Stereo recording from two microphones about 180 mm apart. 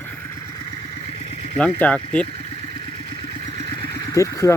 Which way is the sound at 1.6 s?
10° left (ahead or behind).